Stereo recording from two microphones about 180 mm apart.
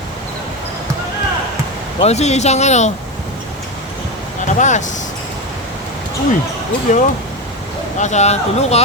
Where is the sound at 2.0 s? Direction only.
35° left (ahead or behind).